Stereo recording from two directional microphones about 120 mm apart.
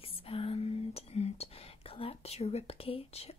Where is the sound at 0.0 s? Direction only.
50° left (ahead or behind).